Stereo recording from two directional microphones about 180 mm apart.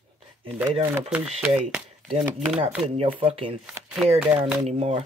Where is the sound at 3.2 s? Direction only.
30° right (ahead or behind).